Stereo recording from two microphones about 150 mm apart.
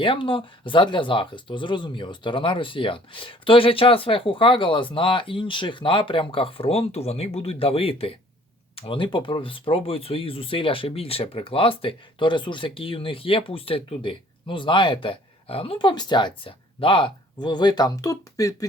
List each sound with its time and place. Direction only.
0.0 s speech: 35° left (ahead or behind)